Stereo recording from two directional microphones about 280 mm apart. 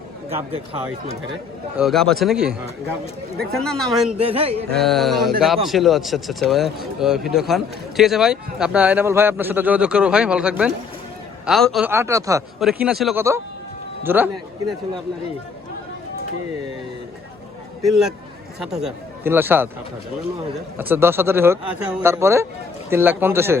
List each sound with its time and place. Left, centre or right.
0.3 s speech: right
1.7 s speech: centre
4.2 s speech: centre
4.8 s a man's voice: centre
18.6 s a man's voice: centre
20.7 s a man's voice: centre